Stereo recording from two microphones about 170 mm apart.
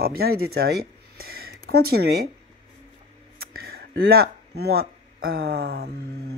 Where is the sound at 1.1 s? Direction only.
65° right (ahead or behind).